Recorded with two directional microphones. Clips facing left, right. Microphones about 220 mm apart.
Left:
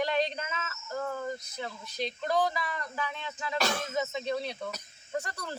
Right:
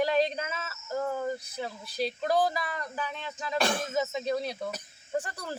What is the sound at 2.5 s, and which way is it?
Speech, 35° right (ahead or behind).